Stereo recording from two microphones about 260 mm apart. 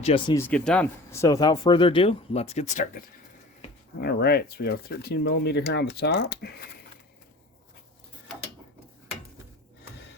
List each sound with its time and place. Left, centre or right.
0.0 s speech: left
0.3 s speech: centre; by 2.9 s left
4.0 s speech: left